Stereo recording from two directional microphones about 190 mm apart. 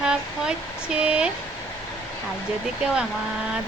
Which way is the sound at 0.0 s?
5° right (ahead or behind).